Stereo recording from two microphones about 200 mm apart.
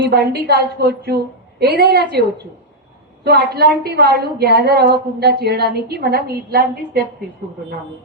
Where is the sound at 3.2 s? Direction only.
50° right (ahead or behind).